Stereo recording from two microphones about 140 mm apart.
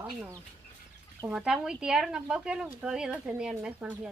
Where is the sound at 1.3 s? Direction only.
5° right (ahead or behind).